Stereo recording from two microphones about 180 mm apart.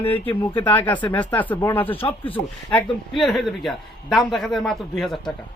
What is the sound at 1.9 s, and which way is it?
Speech, 30° left (ahead or behind).